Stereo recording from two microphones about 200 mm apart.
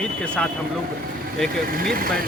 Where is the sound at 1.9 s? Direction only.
45° right (ahead or behind).